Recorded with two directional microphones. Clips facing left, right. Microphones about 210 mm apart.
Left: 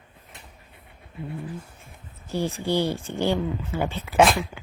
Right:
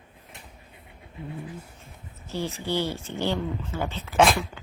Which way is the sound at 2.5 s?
15° left (ahead or behind).